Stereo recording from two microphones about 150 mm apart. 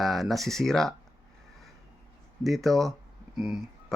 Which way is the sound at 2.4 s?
Centre (ahead or behind).